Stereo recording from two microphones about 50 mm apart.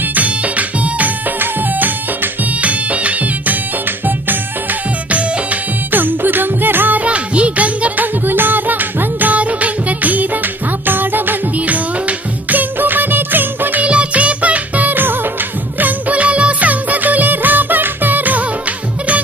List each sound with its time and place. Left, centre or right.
0.0 s music: right
7.0 s music: right
13.8 s music: right